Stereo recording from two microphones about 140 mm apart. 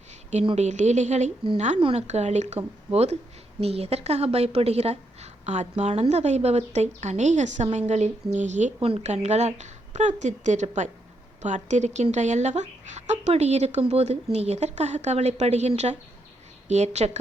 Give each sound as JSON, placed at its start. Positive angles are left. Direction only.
{"t": 0.5, "sound": "speech", "side_deg": -55}
{"t": 1.8, "sound": "speech", "side_deg": -45}
{"t": 8.8, "sound": "speech", "side_deg": -40}